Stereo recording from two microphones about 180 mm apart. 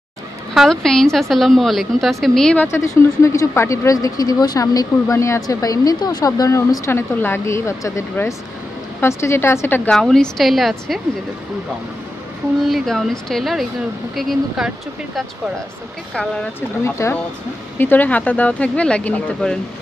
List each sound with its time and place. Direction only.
0.6 s a woman's voice: 5° left (ahead or behind)
12.6 s a woman's voice: centre (ahead or behind)
16.8 s a woman's voice: 15° left (ahead or behind)